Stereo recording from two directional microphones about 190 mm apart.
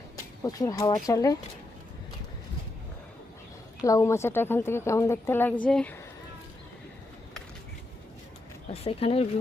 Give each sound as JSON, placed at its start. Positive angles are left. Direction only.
{"t": 0.4, "sound": "a woman's voice", "side_deg": 20}
{"t": 3.8, "sound": "a woman's voice", "side_deg": 15}
{"t": 8.7, "sound": "speech", "side_deg": 30}